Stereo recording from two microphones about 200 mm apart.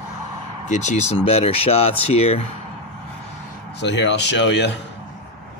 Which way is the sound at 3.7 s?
60° left (ahead or behind).